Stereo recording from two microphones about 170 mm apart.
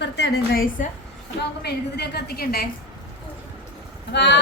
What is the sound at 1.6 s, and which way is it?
A woman's voice, 70° left (ahead or behind).